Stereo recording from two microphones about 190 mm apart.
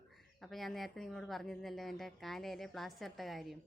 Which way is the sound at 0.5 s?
Centre (ahead or behind).